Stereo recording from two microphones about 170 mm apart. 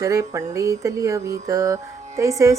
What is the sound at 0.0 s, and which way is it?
Music, 20° right (ahead or behind).